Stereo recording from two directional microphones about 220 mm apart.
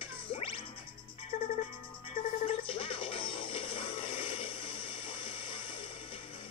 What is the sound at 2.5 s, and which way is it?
Music, 25° left (ahead or behind).